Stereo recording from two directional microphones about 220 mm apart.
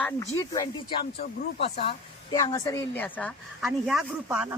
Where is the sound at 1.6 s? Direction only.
25° left (ahead or behind).